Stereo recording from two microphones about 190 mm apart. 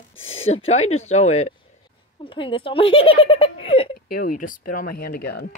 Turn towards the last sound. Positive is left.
turn(degrees=55)  # may be behind; listen again after turning